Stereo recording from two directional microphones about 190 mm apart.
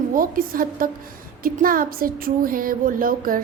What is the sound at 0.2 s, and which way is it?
Speech, 50° right (ahead or behind).